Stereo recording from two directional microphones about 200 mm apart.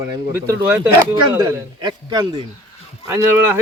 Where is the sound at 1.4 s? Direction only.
20° right (ahead or behind).